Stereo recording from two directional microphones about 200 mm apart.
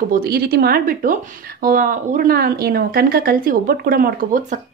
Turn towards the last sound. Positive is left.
turn(degrees=-40)  # may be behind; listen again after turning